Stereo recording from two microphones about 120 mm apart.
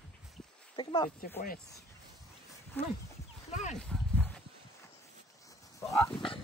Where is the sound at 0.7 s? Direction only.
40° left (ahead or behind).